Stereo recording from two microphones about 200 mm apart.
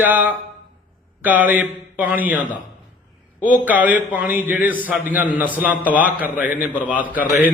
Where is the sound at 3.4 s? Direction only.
10° right (ahead or behind).